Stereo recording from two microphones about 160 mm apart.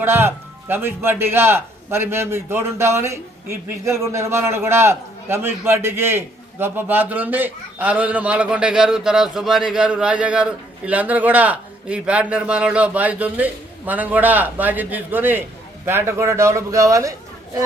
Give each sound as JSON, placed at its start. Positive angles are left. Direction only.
{"t": 0.0, "sound": "a man's voice", "side_deg": -15}